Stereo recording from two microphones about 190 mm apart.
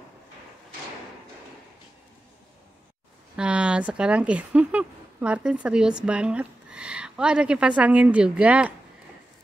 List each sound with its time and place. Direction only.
3.3 s speech: 5° right (ahead or behind)